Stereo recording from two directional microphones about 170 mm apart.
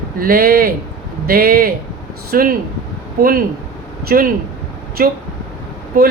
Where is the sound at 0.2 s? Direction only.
60° right (ahead or behind).